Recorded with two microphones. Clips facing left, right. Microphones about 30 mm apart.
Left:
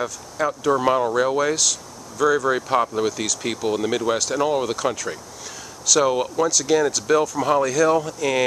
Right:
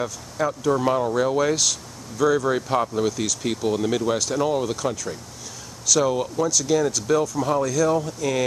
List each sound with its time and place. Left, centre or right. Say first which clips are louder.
0.0 s speech: left 1 dB; centre
1.4 s speech: even; centre; by 4.9 s left
5.9 s speech: left 2 dB; left